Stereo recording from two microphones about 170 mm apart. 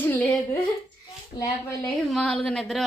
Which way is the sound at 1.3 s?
30° left (ahead or behind).